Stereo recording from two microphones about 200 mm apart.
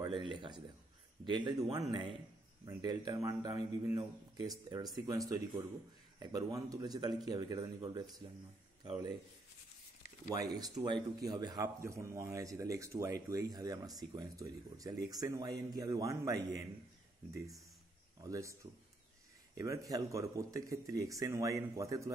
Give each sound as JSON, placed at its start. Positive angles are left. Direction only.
{"t": 0.0, "sound": "a sound", "side_deg": -25}
{"t": 1.2, "sound": "speech", "side_deg": -20}
{"t": 10.2, "sound": "speech", "side_deg": -20}
{"t": 18.2, "sound": "speech", "side_deg": -15}